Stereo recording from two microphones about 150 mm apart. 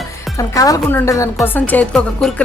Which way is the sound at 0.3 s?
20° left (ahead or behind).